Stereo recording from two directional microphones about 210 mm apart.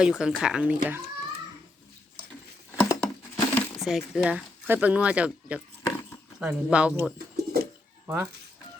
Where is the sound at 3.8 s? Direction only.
5° right (ahead or behind).